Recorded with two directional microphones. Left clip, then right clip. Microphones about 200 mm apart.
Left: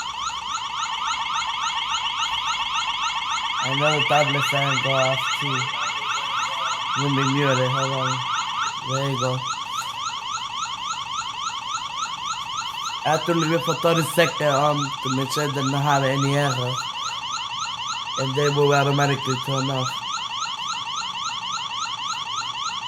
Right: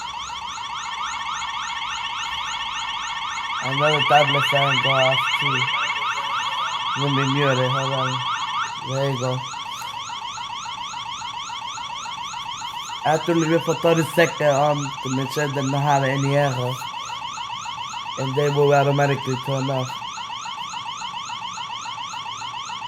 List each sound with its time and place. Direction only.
3.6 s car alarm: 25° right (ahead or behind)
7.0 s siren: 5° left (ahead or behind)
9.0 s siren: centre (ahead or behind)
13.1 s siren: centre (ahead or behind)
18.2 s siren: centre (ahead or behind)